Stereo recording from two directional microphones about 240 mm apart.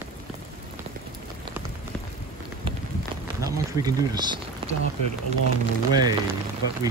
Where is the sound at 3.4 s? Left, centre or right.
Centre.